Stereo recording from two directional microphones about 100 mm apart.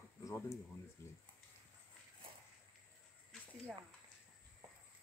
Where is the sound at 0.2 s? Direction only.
30° left (ahead or behind).